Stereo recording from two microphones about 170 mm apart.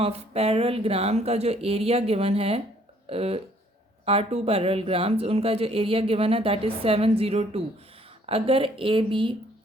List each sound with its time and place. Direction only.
0.0 s speech: 35° right (ahead or behind)